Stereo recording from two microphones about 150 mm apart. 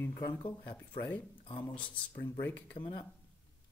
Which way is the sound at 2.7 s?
35° left (ahead or behind).